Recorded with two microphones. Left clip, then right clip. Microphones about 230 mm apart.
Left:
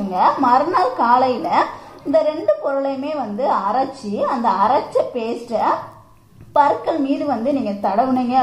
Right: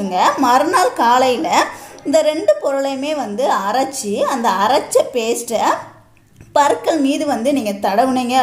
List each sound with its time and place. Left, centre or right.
0.1 s a woman's voice: right